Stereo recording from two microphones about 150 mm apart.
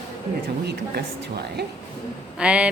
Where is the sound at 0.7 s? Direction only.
90° right.